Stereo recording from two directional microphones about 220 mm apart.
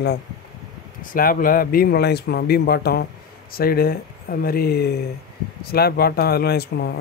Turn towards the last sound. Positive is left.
turn(degrees=45)  # may be behind; listen again after turning